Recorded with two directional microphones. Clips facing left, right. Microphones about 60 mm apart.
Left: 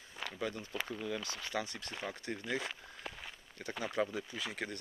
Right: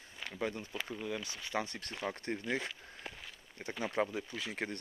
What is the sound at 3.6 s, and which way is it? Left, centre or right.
Speech, right.